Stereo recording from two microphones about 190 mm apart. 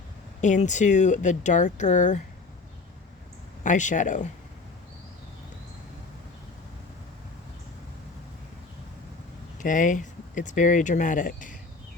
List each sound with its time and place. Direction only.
0.4 s speech: 40° left (ahead or behind)
3.6 s speech: 40° left (ahead or behind)
9.6 s speech: 45° left (ahead or behind)